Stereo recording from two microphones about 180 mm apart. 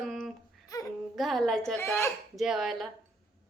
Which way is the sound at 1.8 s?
15° left (ahead or behind).